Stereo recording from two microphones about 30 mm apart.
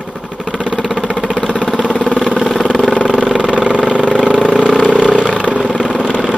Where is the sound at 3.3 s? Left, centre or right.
Right.